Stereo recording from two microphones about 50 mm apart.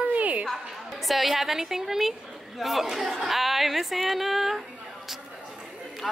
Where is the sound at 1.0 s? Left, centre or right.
Centre.